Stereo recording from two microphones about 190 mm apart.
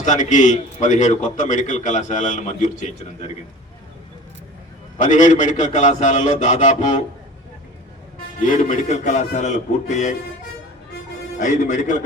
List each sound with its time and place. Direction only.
0.0 s a man's voice: 40° left (ahead or behind)
4.9 s a man's voice: 40° left (ahead or behind)
8.4 s a man's voice: 40° left (ahead or behind)
11.3 s a man's voice: 40° left (ahead or behind)